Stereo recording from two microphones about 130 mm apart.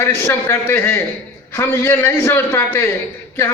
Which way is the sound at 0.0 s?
15° left (ahead or behind).